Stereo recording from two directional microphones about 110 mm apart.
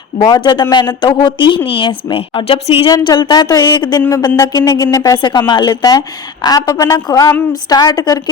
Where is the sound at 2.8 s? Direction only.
40° left (ahead or behind).